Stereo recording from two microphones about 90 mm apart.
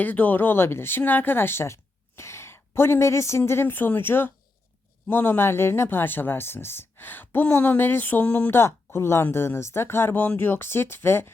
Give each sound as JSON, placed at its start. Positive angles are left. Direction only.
{"t": 0.0, "sound": "speech", "side_deg": 20}